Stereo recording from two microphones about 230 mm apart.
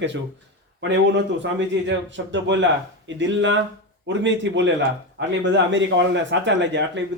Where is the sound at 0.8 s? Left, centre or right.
Right.